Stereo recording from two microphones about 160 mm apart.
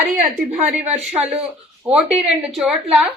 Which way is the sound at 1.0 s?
5° right (ahead or behind).